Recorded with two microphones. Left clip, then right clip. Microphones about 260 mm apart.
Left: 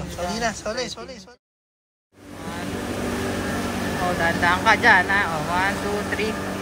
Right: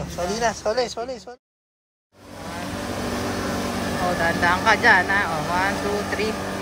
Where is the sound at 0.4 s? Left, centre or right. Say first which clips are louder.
Right 5 dB; right.